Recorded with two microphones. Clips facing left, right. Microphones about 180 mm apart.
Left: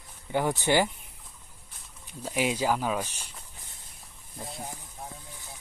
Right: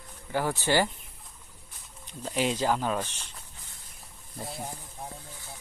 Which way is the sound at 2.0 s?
10° left (ahead or behind).